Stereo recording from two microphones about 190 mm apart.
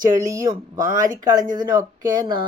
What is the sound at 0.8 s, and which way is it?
Speech, 45° right (ahead or behind).